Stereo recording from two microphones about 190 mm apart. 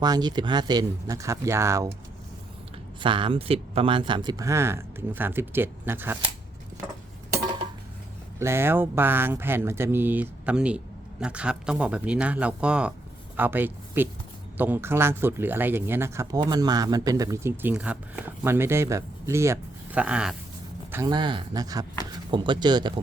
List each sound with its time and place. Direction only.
0.0 s speech: 20° right (ahead or behind)
3.0 s speech: 25° right (ahead or behind); by 6.1 s 10° right (ahead or behind)
8.4 s speech: 15° right (ahead or behind)
20.9 s speech: 20° right (ahead or behind)